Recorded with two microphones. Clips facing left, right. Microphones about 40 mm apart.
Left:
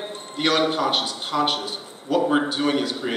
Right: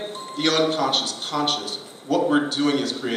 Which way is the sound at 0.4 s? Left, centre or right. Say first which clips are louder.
Even; centre.